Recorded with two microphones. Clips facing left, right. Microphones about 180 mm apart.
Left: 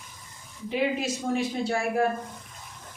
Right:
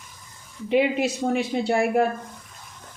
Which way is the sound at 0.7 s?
65° right (ahead or behind).